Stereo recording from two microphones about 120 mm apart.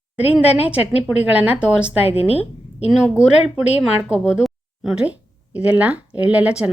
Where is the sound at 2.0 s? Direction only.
55° left (ahead or behind).